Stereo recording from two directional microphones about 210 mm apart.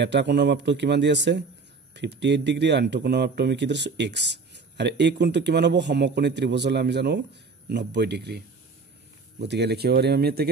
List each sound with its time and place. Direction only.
0.0 s speech: 55° right (ahead or behind)
9.4 s speech: 55° right (ahead or behind)